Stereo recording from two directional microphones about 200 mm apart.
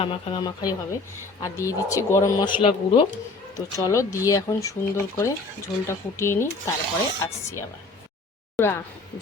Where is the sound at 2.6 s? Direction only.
25° left (ahead or behind).